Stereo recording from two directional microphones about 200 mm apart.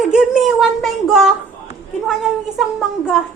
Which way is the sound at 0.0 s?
Centre (ahead or behind).